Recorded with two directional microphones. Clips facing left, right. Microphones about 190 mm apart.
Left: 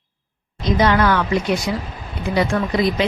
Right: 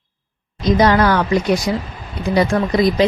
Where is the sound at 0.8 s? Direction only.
40° right (ahead or behind).